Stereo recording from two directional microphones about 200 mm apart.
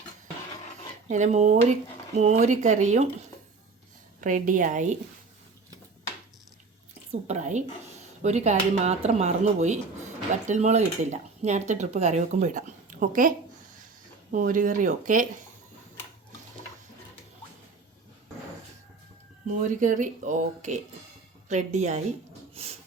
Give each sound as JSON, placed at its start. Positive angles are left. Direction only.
{"t": 1.0, "sound": "speech", "side_deg": -35}
{"t": 7.1, "sound": "speech", "side_deg": -35}
{"t": 19.5, "sound": "speech", "side_deg": -40}